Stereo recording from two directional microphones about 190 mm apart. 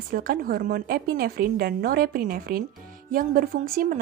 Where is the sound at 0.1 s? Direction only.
50° right (ahead or behind).